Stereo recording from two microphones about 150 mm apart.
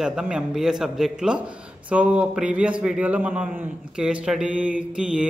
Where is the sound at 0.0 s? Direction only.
5° right (ahead or behind).